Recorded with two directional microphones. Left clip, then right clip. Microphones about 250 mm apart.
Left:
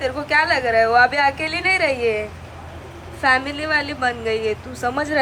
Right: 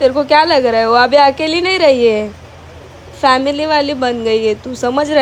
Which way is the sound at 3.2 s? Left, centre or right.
Right.